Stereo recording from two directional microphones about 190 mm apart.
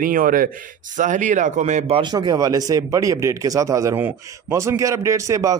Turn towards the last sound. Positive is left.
turn(degrees=-15)  # may be behind; listen again after turning